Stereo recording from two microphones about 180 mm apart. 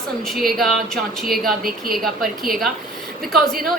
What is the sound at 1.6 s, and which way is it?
Speech, 55° right (ahead or behind).